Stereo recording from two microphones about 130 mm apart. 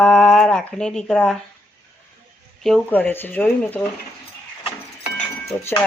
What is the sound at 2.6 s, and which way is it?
Speech, centre (ahead or behind).